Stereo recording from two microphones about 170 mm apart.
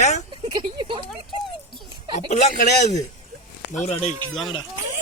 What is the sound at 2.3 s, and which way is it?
Speech, 45° left (ahead or behind).